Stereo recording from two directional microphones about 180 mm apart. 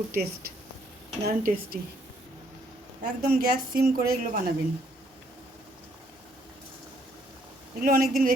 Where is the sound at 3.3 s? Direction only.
55° right (ahead or behind).